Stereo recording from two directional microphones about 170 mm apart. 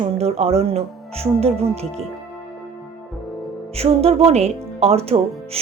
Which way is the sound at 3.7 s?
35° right (ahead or behind).